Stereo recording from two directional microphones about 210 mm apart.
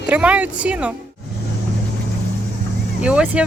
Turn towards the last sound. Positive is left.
turn(degrees=-5)  # may be behind; listen again after turning